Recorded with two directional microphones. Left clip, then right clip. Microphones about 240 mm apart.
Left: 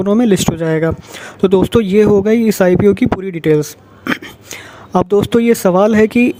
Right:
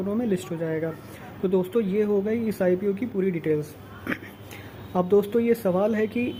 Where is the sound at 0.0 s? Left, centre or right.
Left.